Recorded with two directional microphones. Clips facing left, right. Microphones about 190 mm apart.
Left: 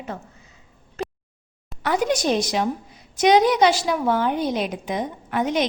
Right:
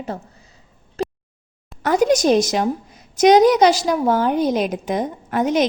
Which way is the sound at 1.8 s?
45° right (ahead or behind).